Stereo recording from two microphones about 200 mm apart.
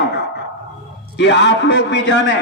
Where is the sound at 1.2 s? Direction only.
60° left (ahead or behind).